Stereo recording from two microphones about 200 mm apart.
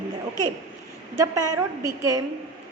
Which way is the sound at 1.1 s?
15° right (ahead or behind).